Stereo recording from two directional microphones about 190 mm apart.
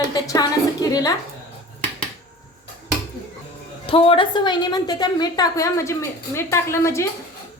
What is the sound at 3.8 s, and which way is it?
A woman's voice, 30° left (ahead or behind).